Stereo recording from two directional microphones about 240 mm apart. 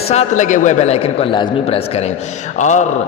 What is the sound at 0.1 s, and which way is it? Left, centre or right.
A man's voice, left.